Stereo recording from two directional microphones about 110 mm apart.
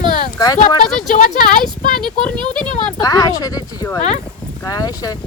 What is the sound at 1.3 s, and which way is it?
Speech, 45° right (ahead or behind).